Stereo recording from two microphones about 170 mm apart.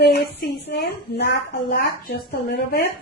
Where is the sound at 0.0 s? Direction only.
75° left (ahead or behind).